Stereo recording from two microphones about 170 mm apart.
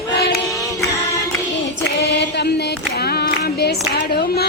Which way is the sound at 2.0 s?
85° left.